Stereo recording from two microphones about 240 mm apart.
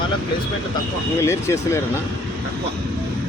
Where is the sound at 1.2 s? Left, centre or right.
Centre.